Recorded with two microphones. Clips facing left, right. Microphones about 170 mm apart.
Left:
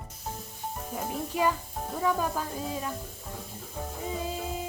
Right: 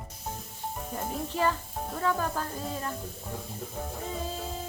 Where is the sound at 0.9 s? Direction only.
5° left (ahead or behind).